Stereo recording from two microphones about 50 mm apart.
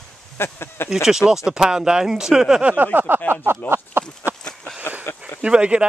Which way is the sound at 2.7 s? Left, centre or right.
Right.